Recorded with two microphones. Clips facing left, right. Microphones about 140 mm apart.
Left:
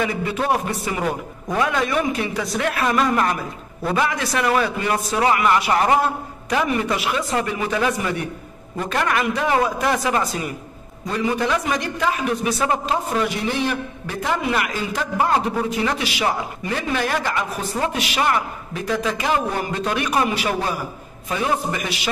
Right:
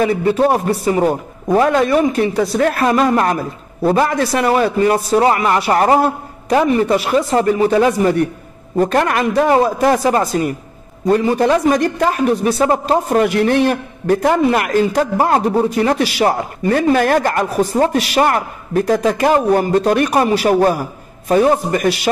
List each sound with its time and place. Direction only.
0.0 s a man's voice: 40° right (ahead or behind)